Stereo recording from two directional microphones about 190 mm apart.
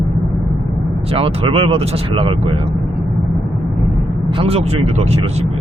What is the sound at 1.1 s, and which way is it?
Speech, 30° right (ahead or behind).